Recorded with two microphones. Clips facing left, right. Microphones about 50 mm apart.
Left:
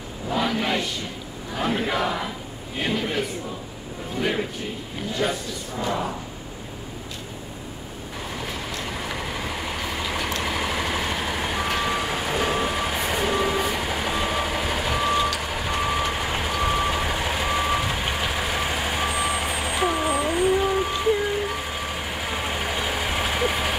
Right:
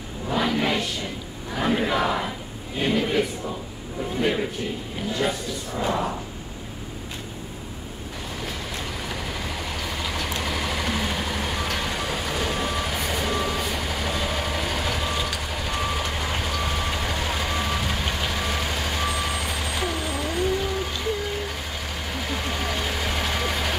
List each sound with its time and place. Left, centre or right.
0.3 s a sound: centre
1.5 s speech: centre
4.2 s a sound: centre
9.2 s vehicle: centre
15.4 s reversing beeps: centre
22.1 s vehicle: centre